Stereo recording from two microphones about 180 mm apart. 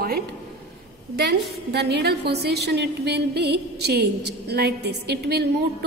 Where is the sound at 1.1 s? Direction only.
65° right (ahead or behind).